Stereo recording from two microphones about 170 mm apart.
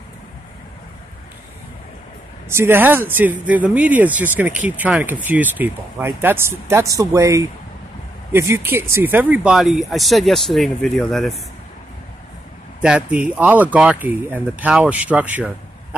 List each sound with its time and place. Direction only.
2.5 s speech: 15° right (ahead or behind)
12.8 s speech: 5° right (ahead or behind)